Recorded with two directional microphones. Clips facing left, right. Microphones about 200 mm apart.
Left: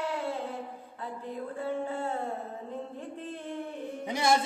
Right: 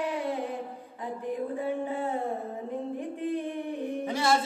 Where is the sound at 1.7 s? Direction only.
15° right (ahead or behind).